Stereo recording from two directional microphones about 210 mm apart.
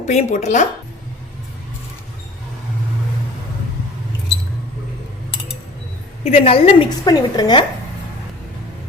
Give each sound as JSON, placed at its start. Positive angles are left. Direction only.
{"t": 0.0, "sound": "speech", "side_deg": 35}
{"t": 6.2, "sound": "a woman's voice", "side_deg": 25}